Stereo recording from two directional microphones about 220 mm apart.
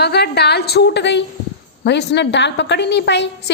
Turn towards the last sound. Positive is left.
turn(degrees=50)  # may be behind; listen again after turning